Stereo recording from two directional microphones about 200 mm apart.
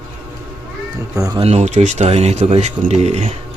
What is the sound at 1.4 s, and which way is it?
Speech, 35° right (ahead or behind).